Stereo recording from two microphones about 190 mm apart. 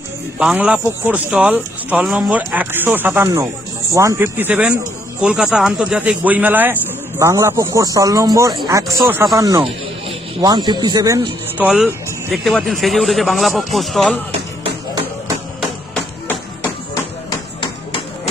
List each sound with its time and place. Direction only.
0.3 s speech: 5° right (ahead or behind)
16.9 s tap: 25° left (ahead or behind)